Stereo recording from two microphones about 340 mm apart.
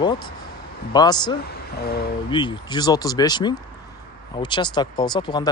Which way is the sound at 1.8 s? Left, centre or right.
Left.